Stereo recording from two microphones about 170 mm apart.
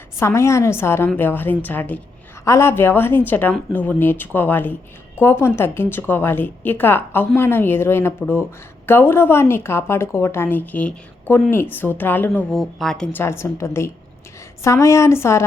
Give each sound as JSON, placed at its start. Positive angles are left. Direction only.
{"t": 0.2, "sound": "a woman's voice", "side_deg": 15}
{"t": 13.2, "sound": "a woman's voice", "side_deg": 15}